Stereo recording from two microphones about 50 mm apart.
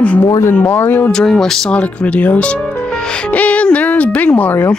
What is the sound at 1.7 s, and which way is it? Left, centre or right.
Speech, left.